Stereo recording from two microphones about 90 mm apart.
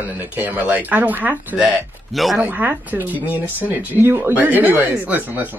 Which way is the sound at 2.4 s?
20° right (ahead or behind).